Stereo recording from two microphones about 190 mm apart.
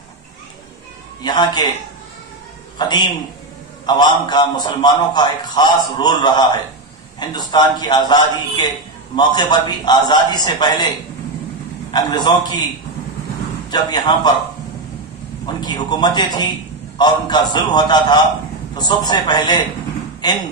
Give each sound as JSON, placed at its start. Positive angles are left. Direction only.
{"t": 1.2, "sound": "a man's voice", "side_deg": 20}
{"t": 2.8, "sound": "a man's voice", "side_deg": 20}
{"t": 11.9, "sound": "a man's voice", "side_deg": 20}
{"t": 13.7, "sound": "a man's voice", "side_deg": 20}
{"t": 15.4, "sound": "a man's voice", "side_deg": 20}